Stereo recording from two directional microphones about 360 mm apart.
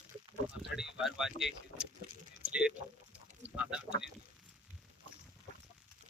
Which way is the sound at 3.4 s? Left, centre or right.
Centre.